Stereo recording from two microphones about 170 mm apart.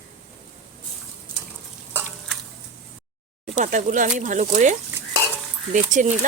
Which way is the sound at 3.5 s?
45° right (ahead or behind).